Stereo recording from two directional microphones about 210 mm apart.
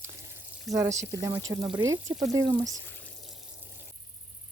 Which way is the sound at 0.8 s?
15° right (ahead or behind).